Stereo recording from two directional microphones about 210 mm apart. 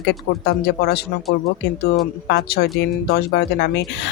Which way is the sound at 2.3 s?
50° left (ahead or behind).